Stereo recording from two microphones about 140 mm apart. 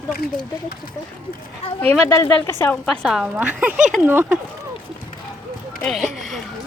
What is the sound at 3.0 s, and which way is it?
Speech, 5° right (ahead or behind).